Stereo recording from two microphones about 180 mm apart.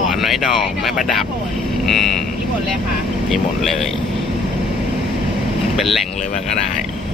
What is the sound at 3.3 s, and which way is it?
Speech, centre (ahead or behind).